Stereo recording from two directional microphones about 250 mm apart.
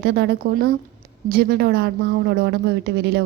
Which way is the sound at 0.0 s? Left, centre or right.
Right.